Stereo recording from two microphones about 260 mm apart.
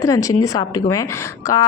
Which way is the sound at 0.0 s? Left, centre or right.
Centre.